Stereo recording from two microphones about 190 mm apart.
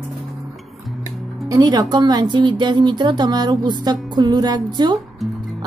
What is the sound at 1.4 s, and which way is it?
Speech, 20° right (ahead or behind).